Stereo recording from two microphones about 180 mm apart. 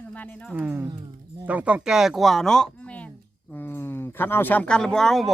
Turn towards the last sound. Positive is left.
turn(degrees=0)  # may be behind; listen again after turning